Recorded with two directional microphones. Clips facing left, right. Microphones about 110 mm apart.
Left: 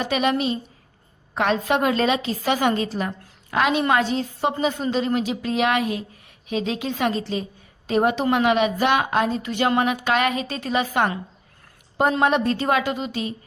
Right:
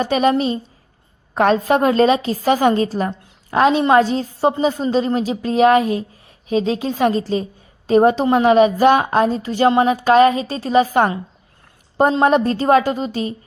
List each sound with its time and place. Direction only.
0.0 s a woman's voice: 40° right (ahead or behind)
12.2 s a woman's voice: 40° right (ahead or behind)